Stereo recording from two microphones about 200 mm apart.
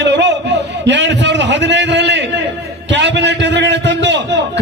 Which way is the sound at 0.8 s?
60° right (ahead or behind).